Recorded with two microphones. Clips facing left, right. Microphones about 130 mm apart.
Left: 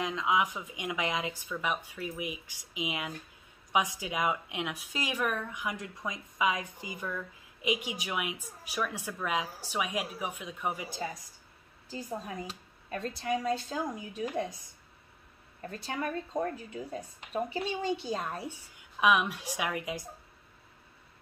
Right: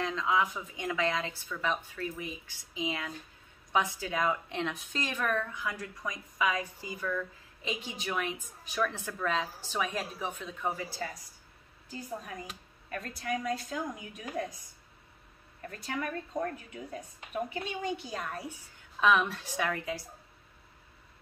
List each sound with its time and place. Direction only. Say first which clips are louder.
0.0 s a woman's voice: even; 15° left (ahead or behind)
12.4 s speech: left 2 dB; 25° left (ahead or behind)
15.7 s speech: left 1 dB; 30° left (ahead or behind)
18.9 s a woman's voice: even; 15° left (ahead or behind)